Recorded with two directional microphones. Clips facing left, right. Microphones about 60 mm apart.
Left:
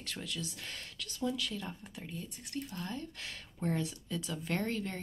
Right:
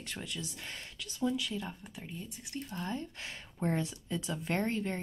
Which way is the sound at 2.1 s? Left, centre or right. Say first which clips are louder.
Left 2 dB; centre.